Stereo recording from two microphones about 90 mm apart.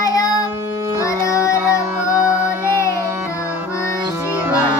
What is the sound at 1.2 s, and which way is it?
Music, 35° left (ahead or behind).